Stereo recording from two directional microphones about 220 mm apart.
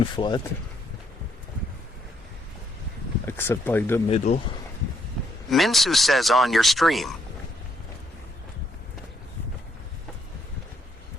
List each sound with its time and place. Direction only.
0.0 s speech: 20° left (ahead or behind)
3.2 s speech: 10° left (ahead or behind)
4.3 s speech: 30° left (ahead or behind)
5.5 s speech: centre (ahead or behind)